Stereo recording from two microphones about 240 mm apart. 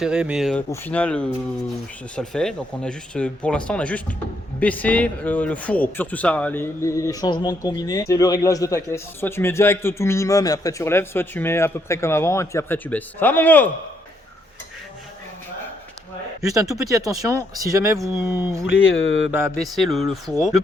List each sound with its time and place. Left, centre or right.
0.0 s speech: centre
16.4 s speech: centre
16.9 s speech: centre
18.9 s speech: left
19.7 s speech: centre